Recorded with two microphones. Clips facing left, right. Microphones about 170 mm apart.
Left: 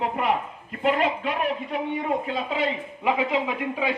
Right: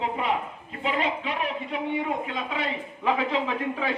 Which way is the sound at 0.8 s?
50° left (ahead or behind).